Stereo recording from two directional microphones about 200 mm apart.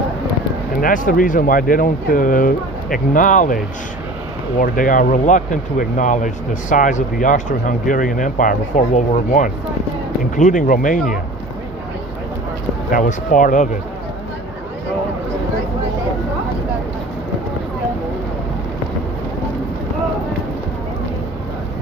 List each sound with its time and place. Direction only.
0.8 s speech: 40° left (ahead or behind)
4.6 s speech: 40° left (ahead or behind)
12.9 s speech: 40° left (ahead or behind)